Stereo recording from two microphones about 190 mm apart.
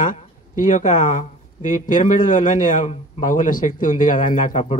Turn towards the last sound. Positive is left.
turn(degrees=40)  # may be behind; listen again after turning